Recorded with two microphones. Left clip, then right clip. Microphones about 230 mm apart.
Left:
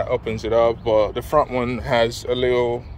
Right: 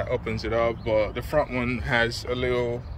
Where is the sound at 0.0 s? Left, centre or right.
Centre.